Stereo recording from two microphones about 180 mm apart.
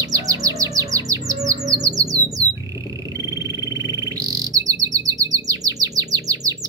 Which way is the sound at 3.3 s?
20° right (ahead or behind).